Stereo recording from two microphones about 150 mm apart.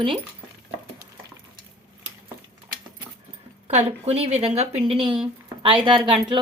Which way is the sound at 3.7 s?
45° right (ahead or behind).